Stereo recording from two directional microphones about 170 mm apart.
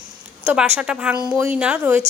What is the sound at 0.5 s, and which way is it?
Speech, 5° right (ahead or behind).